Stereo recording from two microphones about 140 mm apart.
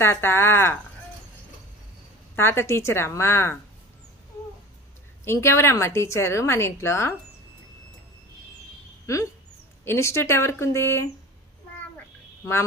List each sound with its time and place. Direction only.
0.0 s a woman's voice: 15° left (ahead or behind)
2.3 s a woman's voice: 15° left (ahead or behind)
5.2 s a woman's voice: 20° left (ahead or behind)
9.1 s a woman's voice: 20° left (ahead or behind)